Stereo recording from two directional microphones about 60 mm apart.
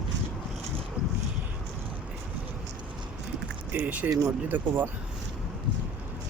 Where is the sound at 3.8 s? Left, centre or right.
Right.